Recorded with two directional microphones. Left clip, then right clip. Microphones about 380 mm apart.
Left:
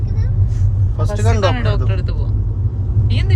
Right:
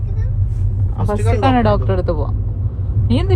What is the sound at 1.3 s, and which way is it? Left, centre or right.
Speech, centre.